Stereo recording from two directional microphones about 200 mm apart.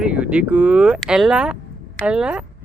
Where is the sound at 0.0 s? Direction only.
5° right (ahead or behind).